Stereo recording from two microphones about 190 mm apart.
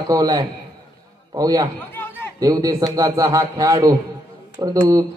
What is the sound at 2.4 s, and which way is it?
A man's voice, 15° right (ahead or behind).